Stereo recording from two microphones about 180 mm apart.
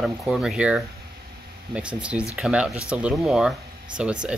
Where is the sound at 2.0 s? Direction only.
5° right (ahead or behind).